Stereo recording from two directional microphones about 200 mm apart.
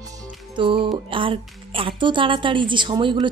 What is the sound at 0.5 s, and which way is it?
Speech, 25° right (ahead or behind).